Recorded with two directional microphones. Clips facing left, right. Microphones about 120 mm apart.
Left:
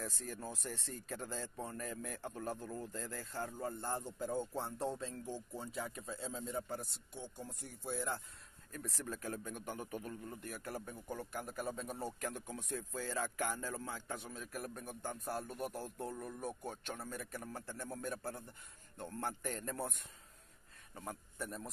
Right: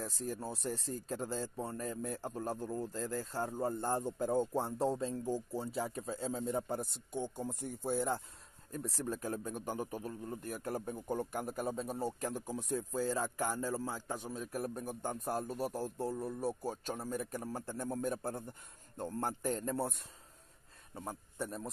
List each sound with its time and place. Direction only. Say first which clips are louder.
0.0 s a man's voice: right 5 dB; 35° right (ahead or behind)
10.4 s a man's voice: right 8 dB; 40° right (ahead or behind); by 21.6 s 25° right (ahead or behind)